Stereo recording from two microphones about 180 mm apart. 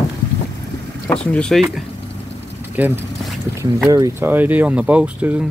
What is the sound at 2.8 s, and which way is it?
Speech, 10° right (ahead or behind).